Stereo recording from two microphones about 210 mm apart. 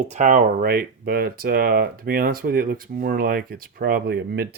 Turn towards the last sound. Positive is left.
turn(degrees=-50)  # may be behind; listen again after turning